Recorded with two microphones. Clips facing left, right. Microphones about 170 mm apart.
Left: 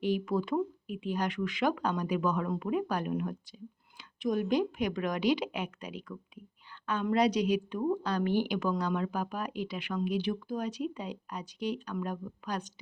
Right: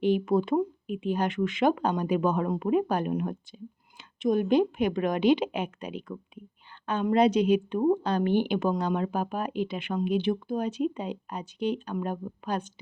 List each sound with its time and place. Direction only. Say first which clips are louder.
0.0 s a woman's voice: right 6 dB; 25° right (ahead or behind)